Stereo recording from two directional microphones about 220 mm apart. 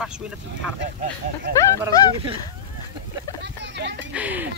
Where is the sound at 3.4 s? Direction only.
50° right (ahead or behind).